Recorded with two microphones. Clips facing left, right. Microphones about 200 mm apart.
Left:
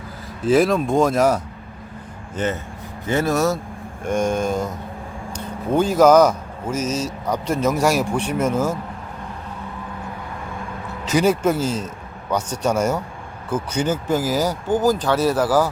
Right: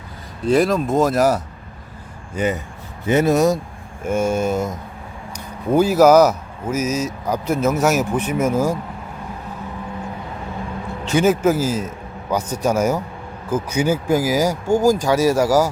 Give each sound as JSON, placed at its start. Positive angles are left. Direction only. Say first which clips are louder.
{"t": 0.4, "sound": "speech", "louder": "even", "side_deg": 0}
{"t": 4.0, "sound": "speech", "louder": "right 1 dB", "side_deg": -5}
{"t": 5.7, "sound": "speech", "louder": "right 2 dB", "side_deg": -5}
{"t": 11.1, "sound": "speech", "louder": "right 2 dB", "side_deg": -5}